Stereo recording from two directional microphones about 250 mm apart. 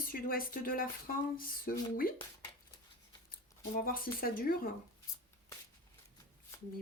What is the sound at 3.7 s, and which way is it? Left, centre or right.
Speech, left.